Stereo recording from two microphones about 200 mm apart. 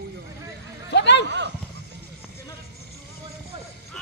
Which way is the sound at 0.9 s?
60° left (ahead or behind).